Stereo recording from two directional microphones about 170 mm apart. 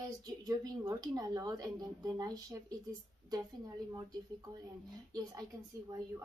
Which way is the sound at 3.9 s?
20° right (ahead or behind).